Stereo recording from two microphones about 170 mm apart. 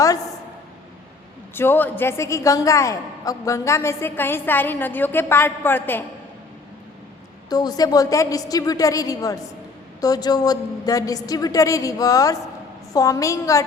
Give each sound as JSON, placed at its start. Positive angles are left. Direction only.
{"t": 1.5, "sound": "a woman's voice", "side_deg": 10}
{"t": 7.5, "sound": "a woman's voice", "side_deg": 20}